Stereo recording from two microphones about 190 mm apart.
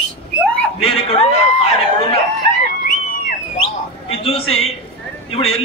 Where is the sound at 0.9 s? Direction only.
30° left (ahead or behind).